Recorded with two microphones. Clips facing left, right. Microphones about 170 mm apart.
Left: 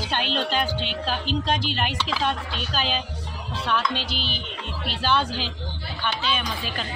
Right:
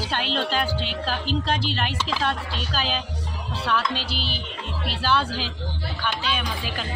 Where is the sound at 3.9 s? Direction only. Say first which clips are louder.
Even; 35° right (ahead or behind).